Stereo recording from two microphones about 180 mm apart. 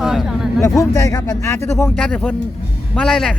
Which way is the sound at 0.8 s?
20° left (ahead or behind).